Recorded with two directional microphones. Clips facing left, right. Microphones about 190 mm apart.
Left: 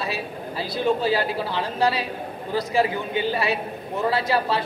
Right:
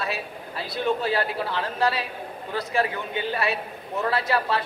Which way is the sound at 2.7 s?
30° left (ahead or behind).